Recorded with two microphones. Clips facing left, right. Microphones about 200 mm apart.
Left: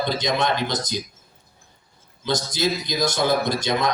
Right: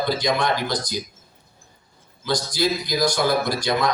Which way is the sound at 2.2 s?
20° left (ahead or behind).